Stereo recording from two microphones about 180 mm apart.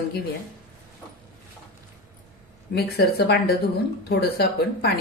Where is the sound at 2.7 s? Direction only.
60° left (ahead or behind).